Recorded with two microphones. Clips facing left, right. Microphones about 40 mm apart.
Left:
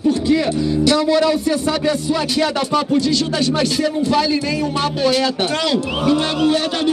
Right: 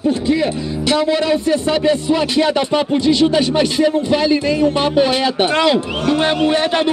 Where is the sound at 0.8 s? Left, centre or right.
Right.